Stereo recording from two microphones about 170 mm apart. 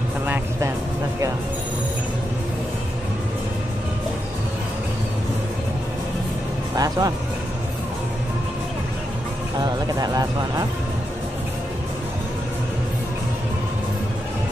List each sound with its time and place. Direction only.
0.3 s music: 15° right (ahead or behind)
6.7 s music: 20° right (ahead or behind)
9.9 s speech: 20° right (ahead or behind)